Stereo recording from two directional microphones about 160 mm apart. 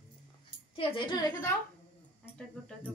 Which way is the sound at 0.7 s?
35° left (ahead or behind).